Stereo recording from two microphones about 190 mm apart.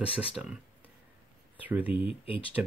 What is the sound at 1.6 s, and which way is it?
Speech, 10° right (ahead or behind).